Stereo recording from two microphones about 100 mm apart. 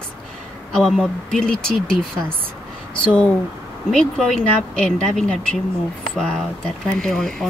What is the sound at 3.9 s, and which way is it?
Speech, 5° left (ahead or behind).